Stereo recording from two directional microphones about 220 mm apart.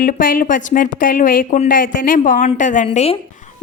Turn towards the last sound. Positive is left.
turn(degrees=30)  # may be behind; listen again after turning